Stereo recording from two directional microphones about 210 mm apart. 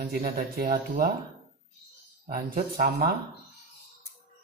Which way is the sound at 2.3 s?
40° right (ahead or behind).